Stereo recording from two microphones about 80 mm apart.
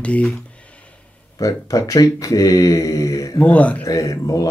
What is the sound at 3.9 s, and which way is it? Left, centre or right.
Speech, left.